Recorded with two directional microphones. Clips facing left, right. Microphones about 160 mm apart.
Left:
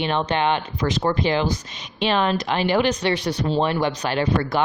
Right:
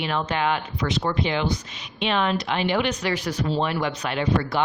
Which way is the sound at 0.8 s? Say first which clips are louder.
Left 3 dB; 45° left (ahead or behind).